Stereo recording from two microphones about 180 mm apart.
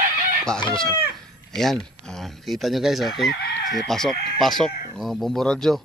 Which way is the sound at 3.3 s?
70° left (ahead or behind).